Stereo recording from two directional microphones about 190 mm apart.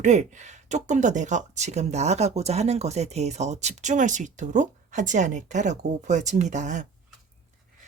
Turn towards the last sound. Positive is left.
turn(degrees=-40)  # may be behind; listen again after turning